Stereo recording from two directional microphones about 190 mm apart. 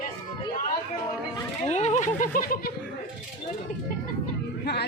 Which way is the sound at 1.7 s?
35° left (ahead or behind).